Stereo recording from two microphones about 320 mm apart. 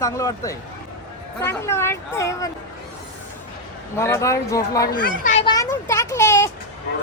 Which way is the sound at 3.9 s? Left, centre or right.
Centre.